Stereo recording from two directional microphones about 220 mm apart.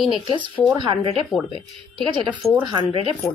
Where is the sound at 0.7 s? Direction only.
20° right (ahead or behind).